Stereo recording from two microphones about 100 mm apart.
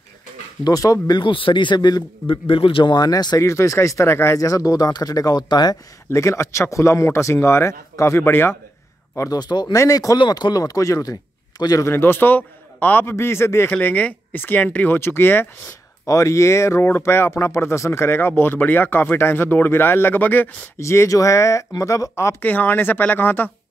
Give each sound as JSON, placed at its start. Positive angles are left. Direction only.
{"t": 0.7, "sound": "speech", "side_deg": 35}
{"t": 1.0, "sound": "speech", "side_deg": 50}
{"t": 2.2, "sound": "speech", "side_deg": 60}
{"t": 3.3, "sound": "speech", "side_deg": 30}
{"t": 4.4, "sound": "speech", "side_deg": 35}
{"t": 6.0, "sound": "speech", "side_deg": 30}
{"t": 9.4, "sound": "speech", "side_deg": 45}
{"t": 9.8, "sound": "speech", "side_deg": 35}
{"t": 10.1, "sound": "speech", "side_deg": 50}
{"t": 11.8, "sound": "speech", "side_deg": 20}
{"t": 20.8, "sound": "speech", "side_deg": 30}
{"t": 22.4, "sound": "speech", "side_deg": 15}